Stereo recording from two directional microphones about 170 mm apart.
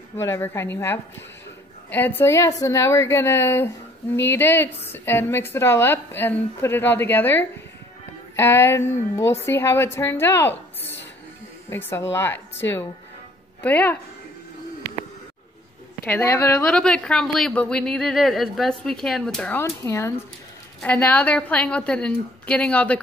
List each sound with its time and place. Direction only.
0.2 s a woman's voice: 15° left (ahead or behind)
11.7 s a woman's voice: 15° left (ahead or behind)
16.1 s speech: 15° left (ahead or behind)
19.6 s a woman's voice: 15° left (ahead or behind)